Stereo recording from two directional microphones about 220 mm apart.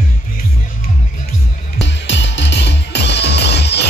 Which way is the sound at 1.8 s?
55° left (ahead or behind).